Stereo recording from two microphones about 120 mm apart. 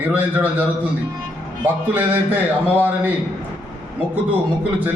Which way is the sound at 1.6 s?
15° right (ahead or behind).